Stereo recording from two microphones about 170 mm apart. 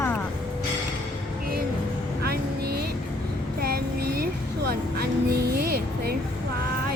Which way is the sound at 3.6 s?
65° right (ahead or behind).